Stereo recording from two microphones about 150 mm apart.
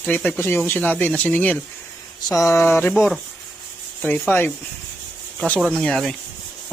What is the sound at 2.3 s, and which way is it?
Speech, 20° left (ahead or behind).